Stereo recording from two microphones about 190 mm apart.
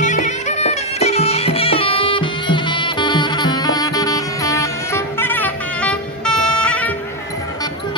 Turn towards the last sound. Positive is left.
turn(degrees=5)  # may be behind; listen again after turning